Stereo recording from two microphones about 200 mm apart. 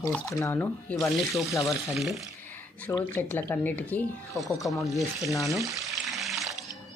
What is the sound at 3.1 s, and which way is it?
Speech, 10° left (ahead or behind).